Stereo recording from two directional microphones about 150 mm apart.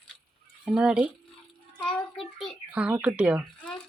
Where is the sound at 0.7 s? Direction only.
10° right (ahead or behind).